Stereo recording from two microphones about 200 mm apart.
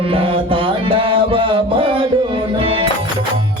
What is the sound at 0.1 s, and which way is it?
Music, 25° right (ahead or behind).